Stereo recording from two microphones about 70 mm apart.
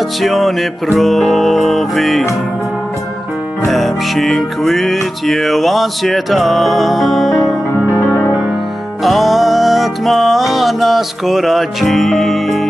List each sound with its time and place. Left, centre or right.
0.2 s music: centre
3.6 s music: centre
7.9 s music: left
9.0 s music: centre